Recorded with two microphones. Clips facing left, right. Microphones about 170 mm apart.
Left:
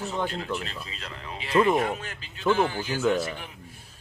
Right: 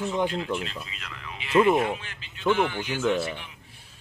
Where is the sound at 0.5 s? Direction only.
35° left (ahead or behind).